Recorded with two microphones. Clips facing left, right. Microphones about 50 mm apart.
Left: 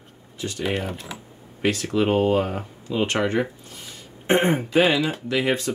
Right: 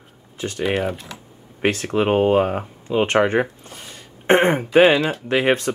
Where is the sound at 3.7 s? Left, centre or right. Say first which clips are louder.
Right 2 dB; right.